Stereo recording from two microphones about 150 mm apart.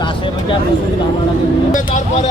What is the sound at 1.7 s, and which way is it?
Speech, 60° left (ahead or behind).